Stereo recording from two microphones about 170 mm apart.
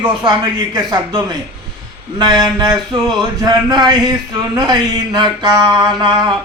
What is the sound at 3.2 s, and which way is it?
A man's voice, 25° right (ahead or behind).